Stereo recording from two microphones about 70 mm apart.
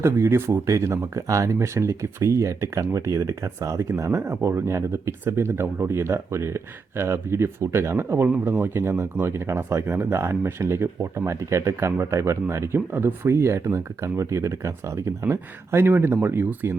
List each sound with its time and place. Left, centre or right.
0.0 s speech: right